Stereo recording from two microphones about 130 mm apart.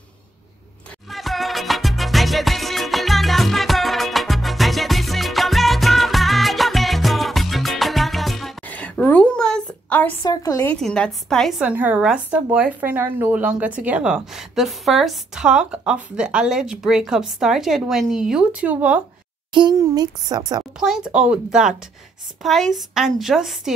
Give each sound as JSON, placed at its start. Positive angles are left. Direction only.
{"t": 1.1, "sound": "music", "side_deg": 0}
{"t": 8.6, "sound": "a sound", "side_deg": 10}
{"t": 10.2, "sound": "a woman's voice", "side_deg": 25}
{"t": 10.8, "sound": "speech", "side_deg": 5}
{"t": 11.6, "sound": "speech", "side_deg": -10}
{"t": 19.5, "sound": "speech", "side_deg": -30}
{"t": 20.8, "sound": "speech", "side_deg": -5}